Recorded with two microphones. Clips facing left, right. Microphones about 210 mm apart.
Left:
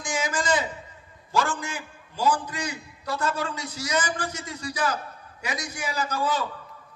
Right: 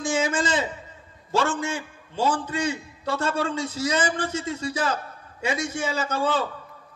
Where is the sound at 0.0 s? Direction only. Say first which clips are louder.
Right 4 dB; 25° right (ahead or behind).